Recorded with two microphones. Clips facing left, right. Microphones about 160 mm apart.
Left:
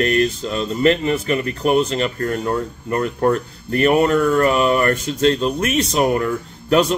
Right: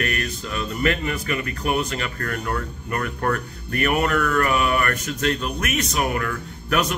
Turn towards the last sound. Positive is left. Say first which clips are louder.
# left 7 dB
turn(degrees=25)  # may be behind; listen again after turning